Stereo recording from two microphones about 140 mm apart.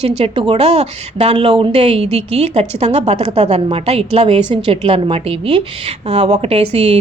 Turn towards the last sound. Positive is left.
turn(degrees=-45)  # may be behind; listen again after turning